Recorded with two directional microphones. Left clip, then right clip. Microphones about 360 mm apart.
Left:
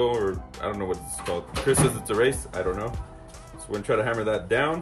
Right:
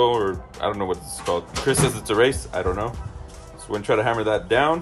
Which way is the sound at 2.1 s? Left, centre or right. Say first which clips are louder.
Right 4 dB; centre.